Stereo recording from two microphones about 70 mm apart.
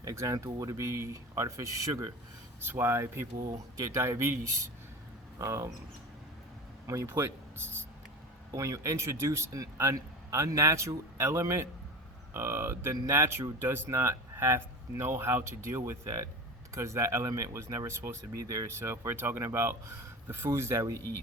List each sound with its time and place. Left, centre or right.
0.0 s a man's voice: right
2.6 s a man's voice: right
5.4 s a man's voice: right
6.8 s speech: right
8.5 s a man's voice: right